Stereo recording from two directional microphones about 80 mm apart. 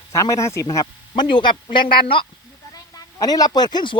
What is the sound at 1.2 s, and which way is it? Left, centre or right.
Speech, left.